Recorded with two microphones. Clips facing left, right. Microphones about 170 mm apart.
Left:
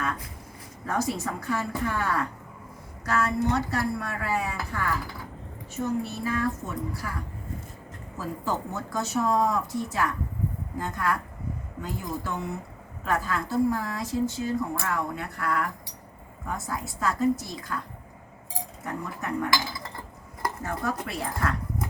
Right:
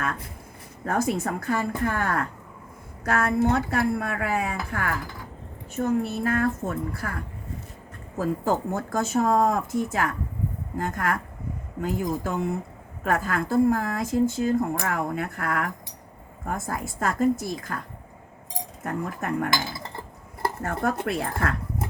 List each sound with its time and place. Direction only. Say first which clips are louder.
0.9 s a woman's voice: right 3 dB; 55° right (ahead or behind)
8.2 s speech: right 6 dB; 50° right (ahead or behind)
20.6 s a woman's voice: right 5 dB; 55° right (ahead or behind)